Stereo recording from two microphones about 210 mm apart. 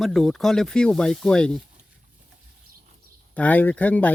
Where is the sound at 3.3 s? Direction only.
5° left (ahead or behind).